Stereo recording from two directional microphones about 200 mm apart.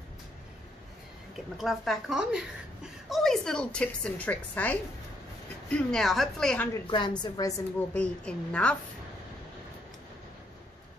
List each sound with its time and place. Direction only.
1.6 s a woman's voice: centre (ahead or behind)
6.9 s a woman's voice: 20° left (ahead or behind); by 8.7 s 5° left (ahead or behind)